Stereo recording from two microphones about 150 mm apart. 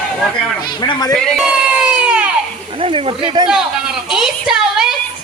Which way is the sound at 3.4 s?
30° right (ahead or behind).